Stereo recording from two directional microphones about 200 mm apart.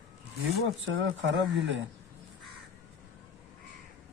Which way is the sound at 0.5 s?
75° right (ahead or behind).